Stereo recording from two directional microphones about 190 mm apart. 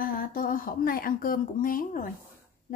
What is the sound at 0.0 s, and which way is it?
Speech, 45° left (ahead or behind).